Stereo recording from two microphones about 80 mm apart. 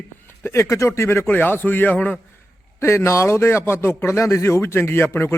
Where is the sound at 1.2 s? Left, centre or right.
Left.